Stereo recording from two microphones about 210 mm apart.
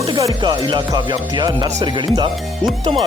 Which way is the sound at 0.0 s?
20° right (ahead or behind).